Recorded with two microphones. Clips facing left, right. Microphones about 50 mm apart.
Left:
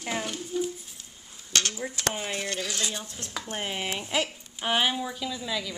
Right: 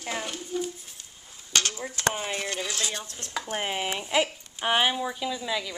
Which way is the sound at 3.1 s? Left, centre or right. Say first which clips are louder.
Right 3 dB; centre.